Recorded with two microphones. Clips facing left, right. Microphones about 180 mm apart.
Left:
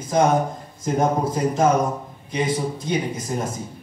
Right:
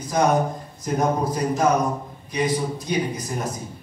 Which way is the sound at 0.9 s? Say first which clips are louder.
Left 1 dB; 25° left (ahead or behind).